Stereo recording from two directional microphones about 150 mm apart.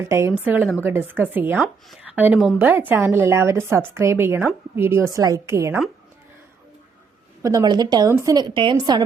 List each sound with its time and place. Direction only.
0.0 s a woman's voice: 20° right (ahead or behind)
7.4 s a woman's voice: 25° right (ahead or behind)